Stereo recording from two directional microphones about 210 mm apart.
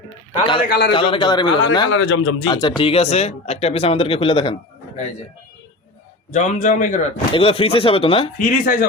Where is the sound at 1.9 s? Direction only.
65° left (ahead or behind).